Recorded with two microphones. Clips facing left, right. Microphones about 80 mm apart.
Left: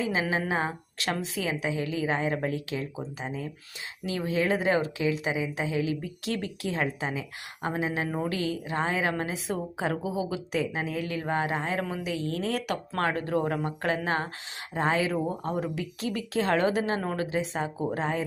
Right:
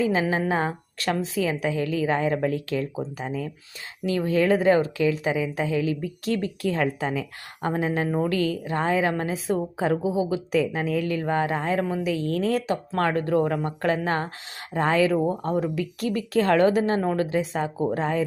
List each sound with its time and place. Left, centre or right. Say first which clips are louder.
0.0 s a woman's voice: right 5 dB; right
4.3 s a woman's voice: right 6 dB; right
6.7 s a woman's voice: right 5 dB; right
7.7 s a woman's voice: right 5 dB; right
10.5 s a woman's voice: right 6 dB; right
11.8 s a woman's voice: right 6 dB; right
12.0 s a woman's voice: right 6 dB; right
12.6 s speech: right 5 dB; right
13.0 s a woman's voice: right 5 dB; right
14.7 s a woman's voice: right 5 dB; right